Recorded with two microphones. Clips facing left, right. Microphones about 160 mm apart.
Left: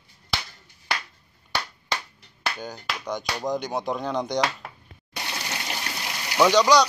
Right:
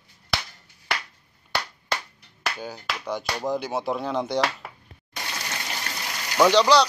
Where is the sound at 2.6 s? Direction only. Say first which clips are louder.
Even; 5° right (ahead or behind).